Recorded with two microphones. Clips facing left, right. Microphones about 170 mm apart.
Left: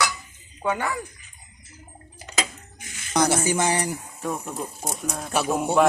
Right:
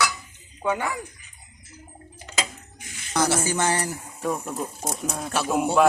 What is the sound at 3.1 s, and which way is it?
Speech, 15° left (ahead or behind).